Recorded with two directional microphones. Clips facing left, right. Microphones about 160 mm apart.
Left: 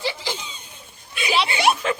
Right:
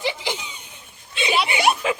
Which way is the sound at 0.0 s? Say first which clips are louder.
Right 1 dB; 15° right (ahead or behind).